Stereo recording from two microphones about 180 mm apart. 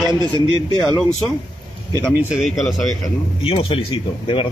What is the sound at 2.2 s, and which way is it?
Speech, 5° right (ahead or behind).